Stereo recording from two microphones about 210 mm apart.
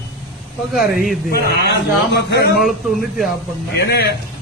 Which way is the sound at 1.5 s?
55° left (ahead or behind).